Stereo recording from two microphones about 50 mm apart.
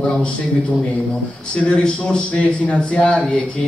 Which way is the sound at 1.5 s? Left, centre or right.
Left.